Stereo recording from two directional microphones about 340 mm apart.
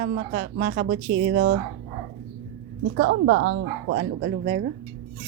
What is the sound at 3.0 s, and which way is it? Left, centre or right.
A woman's voice, right.